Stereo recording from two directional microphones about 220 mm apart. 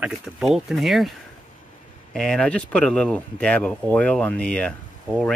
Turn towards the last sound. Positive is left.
turn(degrees=5)  # may be behind; listen again after turning